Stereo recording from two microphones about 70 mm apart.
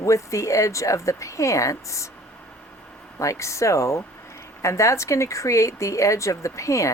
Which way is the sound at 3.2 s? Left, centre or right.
Left.